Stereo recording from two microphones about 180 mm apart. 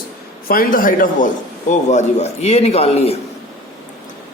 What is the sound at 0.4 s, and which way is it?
A man's voice, 50° left (ahead or behind).